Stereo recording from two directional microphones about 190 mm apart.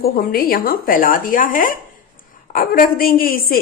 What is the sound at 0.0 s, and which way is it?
A woman's voice, 50° left (ahead or behind).